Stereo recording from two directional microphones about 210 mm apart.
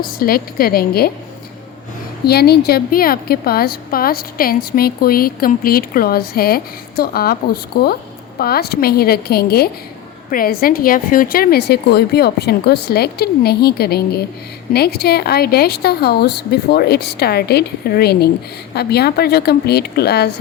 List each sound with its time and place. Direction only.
0.0 s a woman's voice: 45° left (ahead or behind)
2.2 s a woman's voice: 50° left (ahead or behind)